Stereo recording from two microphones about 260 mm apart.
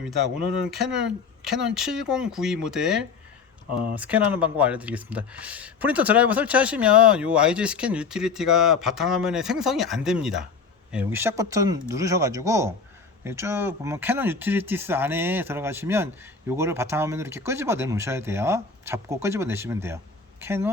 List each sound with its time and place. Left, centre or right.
0.7 s speech: centre